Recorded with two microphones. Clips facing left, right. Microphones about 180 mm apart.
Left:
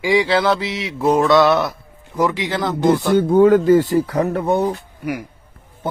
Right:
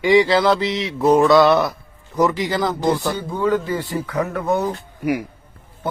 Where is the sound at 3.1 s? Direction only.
50° left (ahead or behind); by 4.7 s 30° left (ahead or behind).